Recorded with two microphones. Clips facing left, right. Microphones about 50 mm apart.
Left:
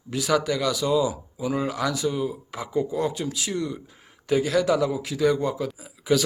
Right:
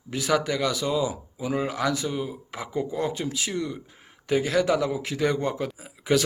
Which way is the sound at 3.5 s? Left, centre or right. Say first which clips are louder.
Left 1 dB; centre.